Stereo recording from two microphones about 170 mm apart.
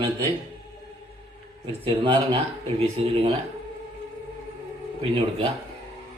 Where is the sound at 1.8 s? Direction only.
30° right (ahead or behind).